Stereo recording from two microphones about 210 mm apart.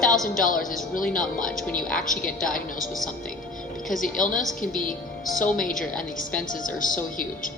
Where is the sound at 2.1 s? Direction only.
40° left (ahead or behind).